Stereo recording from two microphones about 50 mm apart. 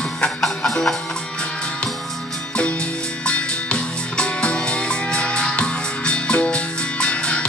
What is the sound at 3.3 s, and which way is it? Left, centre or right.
Music, left.